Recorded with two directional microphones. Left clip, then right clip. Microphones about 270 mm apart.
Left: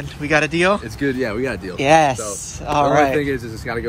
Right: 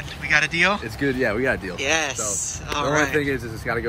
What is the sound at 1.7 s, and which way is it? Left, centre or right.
Speech, centre.